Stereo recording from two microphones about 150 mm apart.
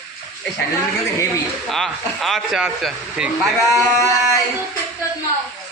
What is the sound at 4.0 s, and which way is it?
Speech, 20° left (ahead or behind).